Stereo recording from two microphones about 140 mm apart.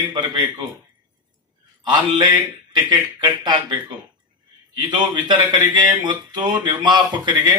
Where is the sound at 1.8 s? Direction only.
35° right (ahead or behind).